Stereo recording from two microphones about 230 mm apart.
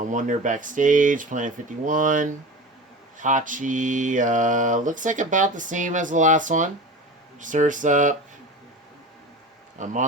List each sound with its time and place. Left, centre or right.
0.1 s mantra: right
9.7 s a man's voice: right